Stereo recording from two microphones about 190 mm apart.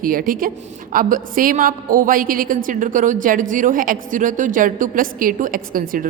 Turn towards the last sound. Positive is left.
turn(degrees=-45)  # may be behind; listen again after turning